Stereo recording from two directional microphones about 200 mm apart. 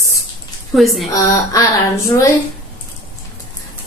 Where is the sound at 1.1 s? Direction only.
15° left (ahead or behind).